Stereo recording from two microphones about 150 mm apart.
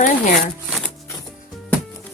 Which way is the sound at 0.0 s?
55° left (ahead or behind).